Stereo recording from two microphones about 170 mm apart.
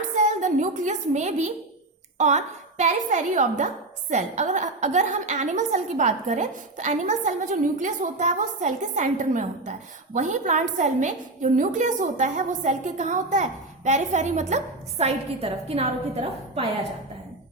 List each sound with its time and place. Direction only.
0.2 s a woman's voice: 45° right (ahead or behind)